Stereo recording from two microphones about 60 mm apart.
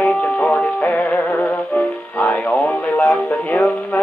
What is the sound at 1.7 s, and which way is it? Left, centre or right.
Music, left.